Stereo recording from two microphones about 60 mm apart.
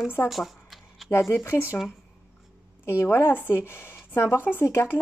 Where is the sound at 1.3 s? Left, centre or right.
Left.